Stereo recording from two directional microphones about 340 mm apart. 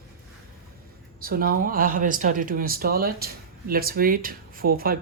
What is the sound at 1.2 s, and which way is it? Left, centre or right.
Speech, right.